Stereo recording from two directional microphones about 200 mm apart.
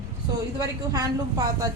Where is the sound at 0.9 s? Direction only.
15° right (ahead or behind).